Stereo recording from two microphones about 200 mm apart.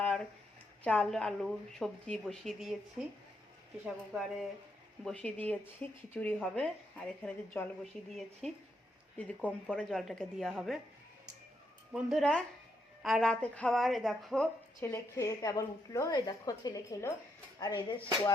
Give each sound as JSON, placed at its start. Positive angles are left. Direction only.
{"t": 0.0, "sound": "a sound", "side_deg": 5}
{"t": 0.9, "sound": "speech", "side_deg": 5}
{"t": 3.8, "sound": "speech", "side_deg": -5}
{"t": 11.9, "sound": "speech", "side_deg": 0}
{"t": 14.8, "sound": "speech", "side_deg": 15}